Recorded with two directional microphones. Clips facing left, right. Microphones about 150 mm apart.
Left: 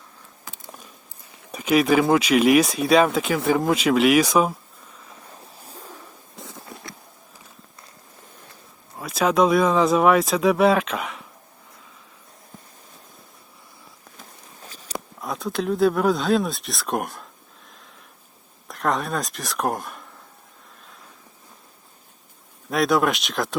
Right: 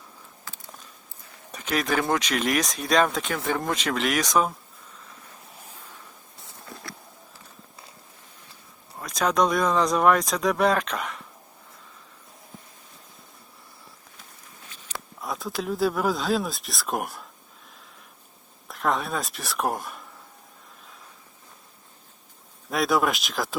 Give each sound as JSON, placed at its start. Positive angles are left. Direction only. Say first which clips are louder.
{"t": 1.5, "sound": "speech", "louder": "left 8 dB", "side_deg": 10}
{"t": 6.3, "sound": "a sound", "louder": "left 9 dB", "side_deg": 90}
{"t": 9.0, "sound": "speech", "louder": "left 4 dB", "side_deg": 5}
{"t": 14.6, "sound": "a sound", "louder": "left 7 dB", "side_deg": 35}
{"t": 15.2, "sound": "speech", "louder": "left 4 dB", "side_deg": 0}
{"t": 18.7, "sound": "speech", "louder": "left 2 dB", "side_deg": 0}
{"t": 22.7, "sound": "speech", "louder": "left 3 dB", "side_deg": 0}